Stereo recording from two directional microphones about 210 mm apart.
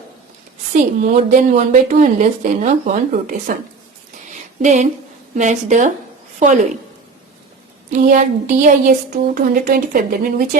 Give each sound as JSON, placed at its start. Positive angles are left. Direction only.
{"t": 0.7, "sound": "a woman's voice", "side_deg": -35}
{"t": 4.4, "sound": "a sound", "side_deg": -35}
{"t": 5.4, "sound": "a woman's voice", "side_deg": -35}
{"t": 8.1, "sound": "a woman's voice", "side_deg": -35}